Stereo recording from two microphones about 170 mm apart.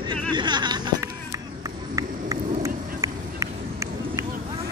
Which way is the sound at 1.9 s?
20° right (ahead or behind).